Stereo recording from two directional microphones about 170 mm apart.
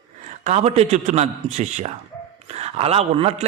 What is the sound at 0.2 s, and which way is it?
A man's voice, 45° right (ahead or behind).